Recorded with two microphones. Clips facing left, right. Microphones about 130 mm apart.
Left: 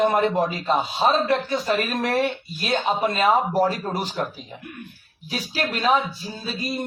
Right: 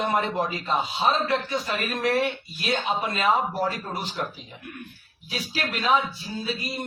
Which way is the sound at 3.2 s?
45° left (ahead or behind).